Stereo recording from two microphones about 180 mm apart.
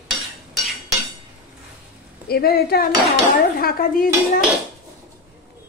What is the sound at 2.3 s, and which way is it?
Dishes, 60° left (ahead or behind).